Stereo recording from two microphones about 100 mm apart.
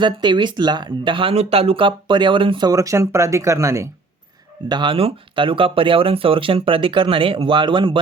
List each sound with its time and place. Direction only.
0.0 s speech: 50° right (ahead or behind)
2.6 s speech: 35° right (ahead or behind)
4.7 s speech: 50° right (ahead or behind)
4.9 s speech: 65° right (ahead or behind)